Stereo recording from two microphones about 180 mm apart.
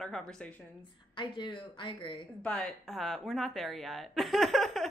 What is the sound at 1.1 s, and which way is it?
A woman's voice, 30° left (ahead or behind).